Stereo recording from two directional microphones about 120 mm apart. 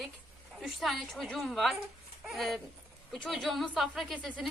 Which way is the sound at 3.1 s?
Centre (ahead or behind).